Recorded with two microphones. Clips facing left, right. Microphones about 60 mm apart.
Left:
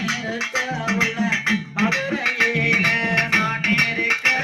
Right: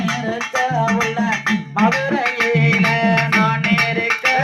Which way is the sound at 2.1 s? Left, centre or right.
Right.